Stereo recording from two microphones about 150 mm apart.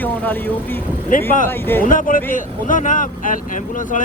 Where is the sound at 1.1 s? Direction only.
70° left (ahead or behind).